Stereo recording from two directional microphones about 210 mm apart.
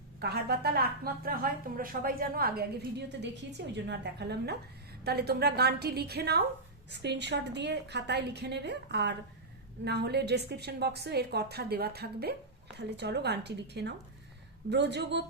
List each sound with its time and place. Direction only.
0.2 s a woman's voice: 50° right (ahead or behind)